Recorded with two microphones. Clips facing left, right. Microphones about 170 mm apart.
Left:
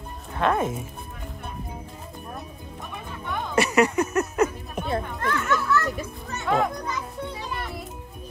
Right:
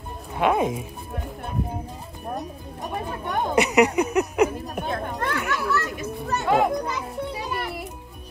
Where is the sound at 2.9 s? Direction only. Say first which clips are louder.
Right 5 dB; 55° right (ahead or behind).